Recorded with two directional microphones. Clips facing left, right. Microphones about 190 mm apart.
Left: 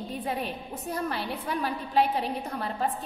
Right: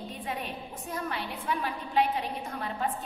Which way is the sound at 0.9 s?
35° left (ahead or behind).